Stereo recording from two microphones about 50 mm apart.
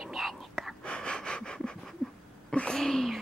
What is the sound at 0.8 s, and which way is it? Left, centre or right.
Breathing, centre.